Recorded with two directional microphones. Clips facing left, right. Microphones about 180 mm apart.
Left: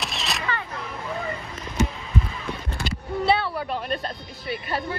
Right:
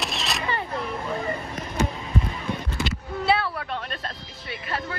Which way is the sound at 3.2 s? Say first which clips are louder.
Left 1 dB; centre (ahead or behind).